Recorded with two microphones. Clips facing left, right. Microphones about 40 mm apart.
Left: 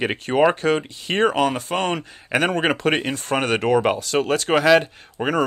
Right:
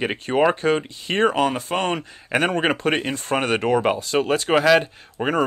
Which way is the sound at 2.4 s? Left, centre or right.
Centre.